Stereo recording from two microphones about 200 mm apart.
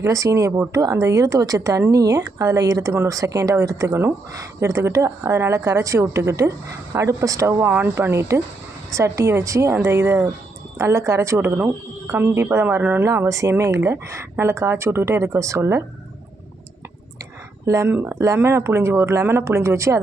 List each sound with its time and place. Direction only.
0.0 s speech: 15° right (ahead or behind)
17.7 s speech: 15° right (ahead or behind)